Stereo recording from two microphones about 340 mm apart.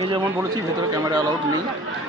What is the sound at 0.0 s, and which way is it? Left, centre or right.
Speech, centre.